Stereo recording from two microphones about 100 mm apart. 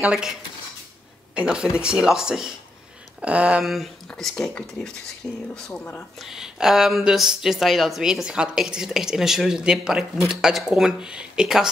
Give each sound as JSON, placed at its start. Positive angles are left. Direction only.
{"t": 0.0, "sound": "speech", "side_deg": -5}
{"t": 1.3, "sound": "speech", "side_deg": -10}
{"t": 3.6, "sound": "speech", "side_deg": 0}
{"t": 6.1, "sound": "speech", "side_deg": -5}